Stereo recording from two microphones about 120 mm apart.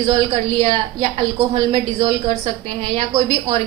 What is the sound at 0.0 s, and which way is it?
A woman's voice, 50° right (ahead or behind).